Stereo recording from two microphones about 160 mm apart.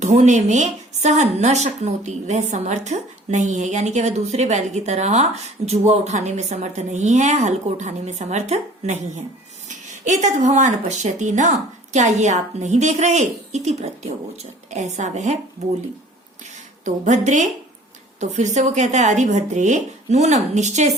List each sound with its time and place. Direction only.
0.0 s a woman's voice: 45° right (ahead or behind)
16.8 s a woman's voice: 50° right (ahead or behind)